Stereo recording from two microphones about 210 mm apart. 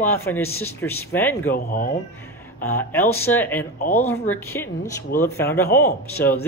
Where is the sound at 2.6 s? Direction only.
10° left (ahead or behind).